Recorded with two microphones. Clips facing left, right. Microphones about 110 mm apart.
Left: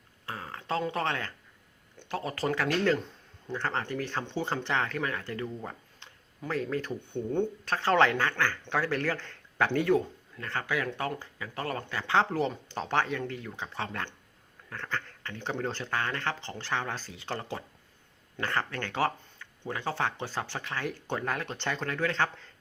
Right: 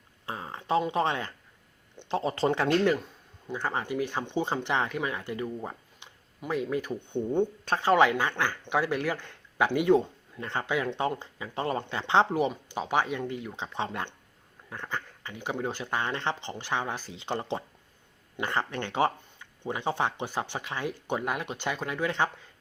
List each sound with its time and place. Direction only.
0.3 s a sound: 20° right (ahead or behind)
2.0 s speech: 25° right (ahead or behind)
3.4 s speech: 10° right (ahead or behind)